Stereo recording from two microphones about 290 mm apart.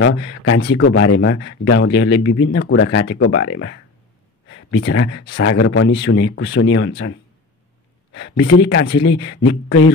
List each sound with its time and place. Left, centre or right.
0.0 s speech: left
8.1 s speech: left